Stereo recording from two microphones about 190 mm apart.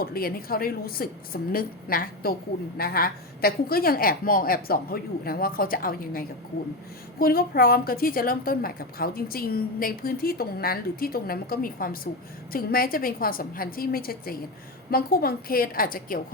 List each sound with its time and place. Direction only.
0.0 s a woman's voice: 50° left (ahead or behind)